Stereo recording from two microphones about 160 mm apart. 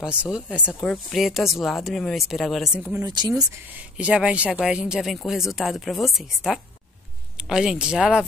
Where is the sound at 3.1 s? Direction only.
25° right (ahead or behind).